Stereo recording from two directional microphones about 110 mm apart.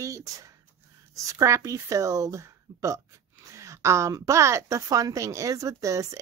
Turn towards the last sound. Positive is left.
turn(degrees=-30)  # may be behind; listen again after turning